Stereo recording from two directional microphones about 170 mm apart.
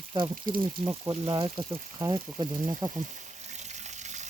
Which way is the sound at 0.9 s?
20° right (ahead or behind).